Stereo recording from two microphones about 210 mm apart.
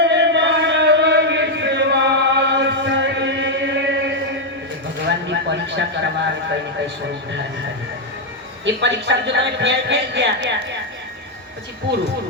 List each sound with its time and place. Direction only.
0.0 s chant: 55° right (ahead or behind)
5.0 s a sound: 55° right (ahead or behind)
8.6 s speech: 60° right (ahead or behind)